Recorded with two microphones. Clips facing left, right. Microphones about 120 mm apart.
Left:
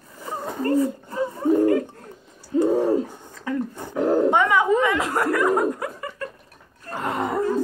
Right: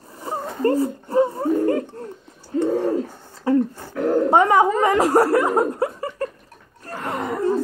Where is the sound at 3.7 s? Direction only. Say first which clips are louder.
Even; 20° left (ahead or behind).